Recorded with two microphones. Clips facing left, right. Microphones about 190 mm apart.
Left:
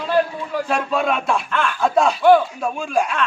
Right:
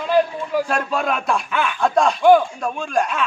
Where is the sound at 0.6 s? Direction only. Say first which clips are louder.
Left 1 dB; centre (ahead or behind).